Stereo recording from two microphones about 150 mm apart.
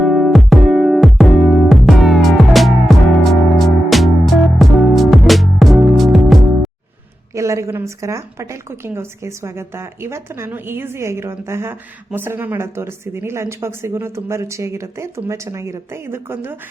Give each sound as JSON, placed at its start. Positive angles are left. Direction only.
{"t": 0.0, "sound": "music", "side_deg": 0}
{"t": 7.3, "sound": "a woman's voice", "side_deg": -20}